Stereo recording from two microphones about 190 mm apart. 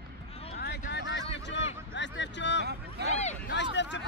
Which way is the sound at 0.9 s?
65° left (ahead or behind).